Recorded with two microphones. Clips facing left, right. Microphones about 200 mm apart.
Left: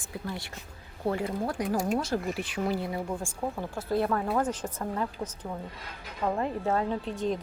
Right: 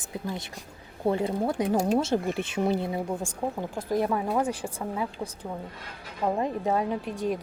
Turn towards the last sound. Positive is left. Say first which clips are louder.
# right 1 dB
turn(degrees=-10)  # may be behind; listen again after turning